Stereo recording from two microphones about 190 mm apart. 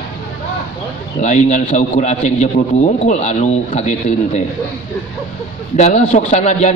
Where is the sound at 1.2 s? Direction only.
35° left (ahead or behind).